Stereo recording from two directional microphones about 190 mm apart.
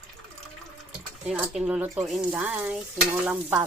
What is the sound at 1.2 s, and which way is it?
Speech, 5° right (ahead or behind).